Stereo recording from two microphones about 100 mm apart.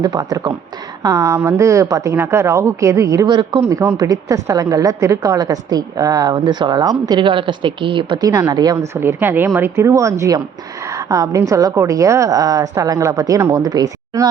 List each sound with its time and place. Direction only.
0.0 s speech: 45° right (ahead or behind)
1.0 s a woman's voice: 30° right (ahead or behind)
3.2 s speech: 50° right (ahead or behind)
3.6 s a woman's voice: 30° right (ahead or behind); by 8.2 s 55° right (ahead or behind)
8.2 s a woman's voice: 35° right (ahead or behind)
9.0 s a woman's voice: 20° right (ahead or behind); by 14.3 s 35° right (ahead or behind)